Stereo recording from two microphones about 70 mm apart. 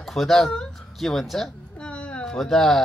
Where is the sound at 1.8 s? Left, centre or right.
Centre.